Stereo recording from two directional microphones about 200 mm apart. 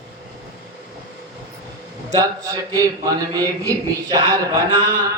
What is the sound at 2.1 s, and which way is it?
A man's voice, 20° right (ahead or behind).